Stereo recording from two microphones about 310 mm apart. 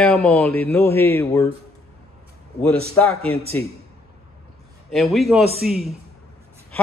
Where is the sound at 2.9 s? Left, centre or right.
Centre.